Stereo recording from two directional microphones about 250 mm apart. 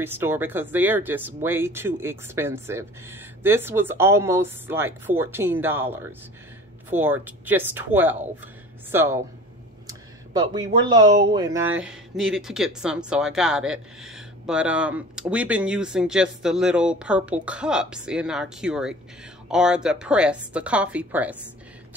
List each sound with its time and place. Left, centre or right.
0.0 s speech: centre
9.8 s a sound: centre
11.3 s speech: centre